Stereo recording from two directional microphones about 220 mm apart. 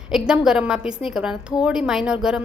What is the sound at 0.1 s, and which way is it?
A woman's voice, 5° right (ahead or behind).